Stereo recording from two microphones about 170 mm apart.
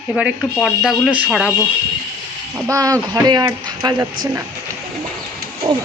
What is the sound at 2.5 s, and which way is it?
Speech, 20° right (ahead or behind).